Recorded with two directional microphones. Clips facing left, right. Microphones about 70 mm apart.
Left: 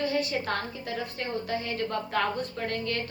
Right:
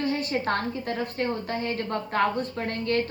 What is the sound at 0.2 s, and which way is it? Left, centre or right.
A woman's voice, right.